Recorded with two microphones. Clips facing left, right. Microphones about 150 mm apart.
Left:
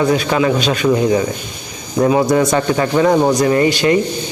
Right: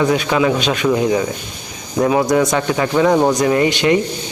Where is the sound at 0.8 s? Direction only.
Centre (ahead or behind).